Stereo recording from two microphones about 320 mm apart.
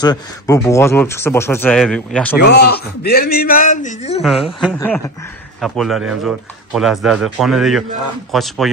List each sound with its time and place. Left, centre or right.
0.0 s speech: centre
2.3 s a man's voice: left
4.2 s speech: centre